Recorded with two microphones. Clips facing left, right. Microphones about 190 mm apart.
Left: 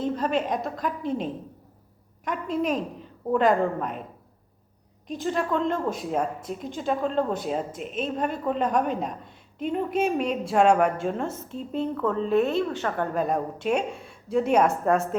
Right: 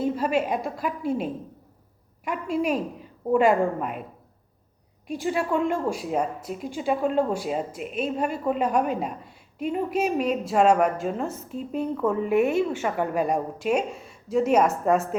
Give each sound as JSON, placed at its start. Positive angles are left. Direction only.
{"t": 0.0, "sound": "a woman's voice", "side_deg": -5}
{"t": 5.2, "sound": "a woman's voice", "side_deg": -10}